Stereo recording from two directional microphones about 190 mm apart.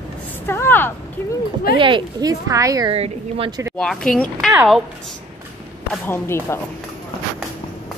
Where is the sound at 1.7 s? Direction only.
25° right (ahead or behind).